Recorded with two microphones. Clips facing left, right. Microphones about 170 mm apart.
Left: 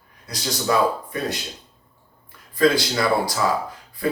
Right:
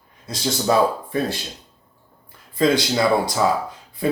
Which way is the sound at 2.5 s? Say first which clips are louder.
Right 1 dB; 25° right (ahead or behind).